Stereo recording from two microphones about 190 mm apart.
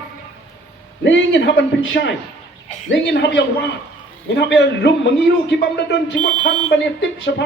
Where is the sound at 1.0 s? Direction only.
75° left (ahead or behind).